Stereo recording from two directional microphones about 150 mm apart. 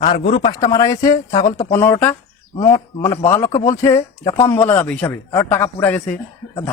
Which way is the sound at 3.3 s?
20° left (ahead or behind).